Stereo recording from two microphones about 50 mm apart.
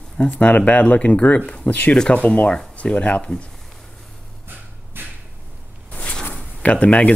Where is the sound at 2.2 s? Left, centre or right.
Left.